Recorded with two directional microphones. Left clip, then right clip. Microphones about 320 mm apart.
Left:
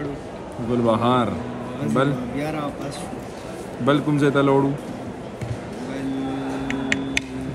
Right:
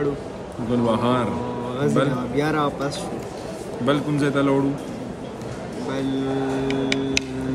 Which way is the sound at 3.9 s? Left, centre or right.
Centre.